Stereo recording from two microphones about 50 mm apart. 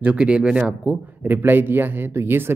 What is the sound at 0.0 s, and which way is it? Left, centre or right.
Speech, right.